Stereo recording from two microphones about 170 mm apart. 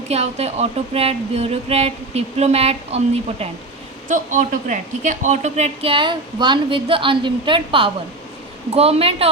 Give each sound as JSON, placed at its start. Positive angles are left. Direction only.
{"t": 0.1, "sound": "speech", "side_deg": -40}
{"t": 4.1, "sound": "speech", "side_deg": -50}